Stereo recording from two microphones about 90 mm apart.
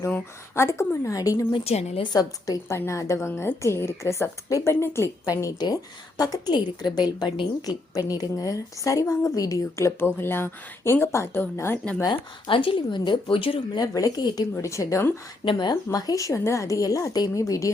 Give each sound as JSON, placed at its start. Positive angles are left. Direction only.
{"t": 0.1, "sound": "a woman's voice", "side_deg": 30}
{"t": 2.6, "sound": "a woman's voice", "side_deg": 30}
{"t": 7.6, "sound": "a woman's voice", "side_deg": 45}
{"t": 12.0, "sound": "speech", "side_deg": 75}
{"t": 13.7, "sound": "a woman's voice", "side_deg": 45}
{"t": 14.5, "sound": "a woman's voice", "side_deg": 35}
{"t": 15.4, "sound": "a woman's voice", "side_deg": 55}